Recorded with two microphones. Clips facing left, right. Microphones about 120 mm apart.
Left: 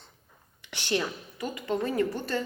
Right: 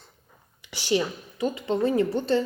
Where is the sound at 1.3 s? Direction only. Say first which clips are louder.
Right 5 dB; 25° right (ahead or behind).